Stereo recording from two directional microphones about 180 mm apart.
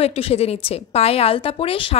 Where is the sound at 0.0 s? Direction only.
35° left (ahead or behind).